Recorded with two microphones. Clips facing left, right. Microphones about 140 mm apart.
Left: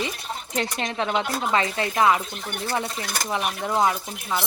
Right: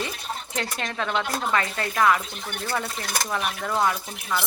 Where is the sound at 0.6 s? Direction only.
20° left (ahead or behind).